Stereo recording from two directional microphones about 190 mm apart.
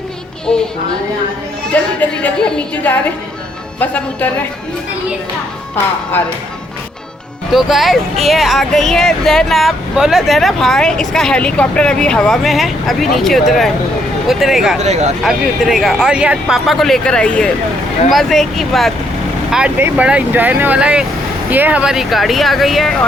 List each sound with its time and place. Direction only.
0.5 s speech: 5° left (ahead or behind)
1.7 s a woman's voice: 10° left (ahead or behind)
7.5 s speech: centre (ahead or behind)
14.8 s speech: 35° right (ahead or behind)
15.2 s speech: centre (ahead or behind)